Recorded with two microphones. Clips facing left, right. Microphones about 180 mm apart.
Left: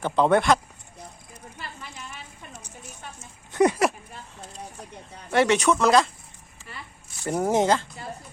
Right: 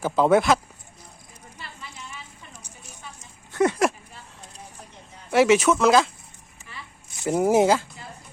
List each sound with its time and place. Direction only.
0.0 s speech: 5° right (ahead or behind)
3.5 s a sound: 15° left (ahead or behind)
5.3 s speech: 5° right (ahead or behind)
7.3 s speech: 5° right (ahead or behind)